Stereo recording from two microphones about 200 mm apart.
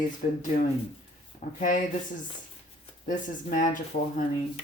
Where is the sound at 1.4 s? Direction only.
40° left (ahead or behind).